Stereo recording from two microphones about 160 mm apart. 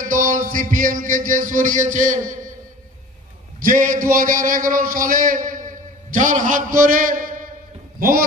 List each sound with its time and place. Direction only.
0.0 s a man's voice: 55° right (ahead or behind)
3.5 s a man's voice: 55° right (ahead or behind)